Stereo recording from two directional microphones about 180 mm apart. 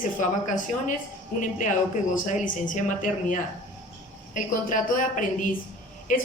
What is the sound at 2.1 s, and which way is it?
Speech, 45° left (ahead or behind).